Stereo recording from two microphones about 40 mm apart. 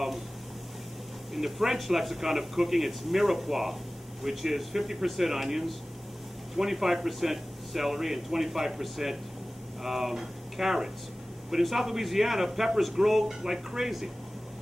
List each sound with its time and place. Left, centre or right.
1.3 s speech: centre